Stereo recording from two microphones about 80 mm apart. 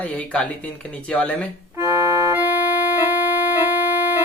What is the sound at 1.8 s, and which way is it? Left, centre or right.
Organ, right.